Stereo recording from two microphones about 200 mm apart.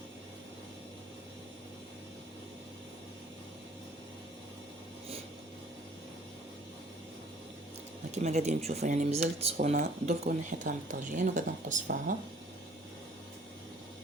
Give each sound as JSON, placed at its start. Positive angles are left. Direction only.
{"t": 8.1, "sound": "speech", "side_deg": -35}